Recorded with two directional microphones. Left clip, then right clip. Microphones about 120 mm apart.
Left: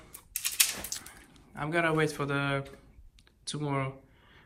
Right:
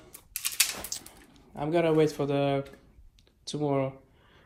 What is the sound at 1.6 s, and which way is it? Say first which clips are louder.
Speech: right 4 dB; 25° right (ahead or behind).